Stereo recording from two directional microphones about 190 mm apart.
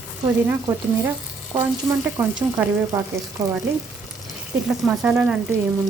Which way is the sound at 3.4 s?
20° right (ahead or behind).